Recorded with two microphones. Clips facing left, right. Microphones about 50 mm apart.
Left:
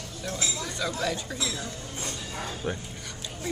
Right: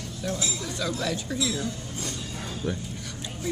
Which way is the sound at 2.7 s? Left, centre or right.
Left.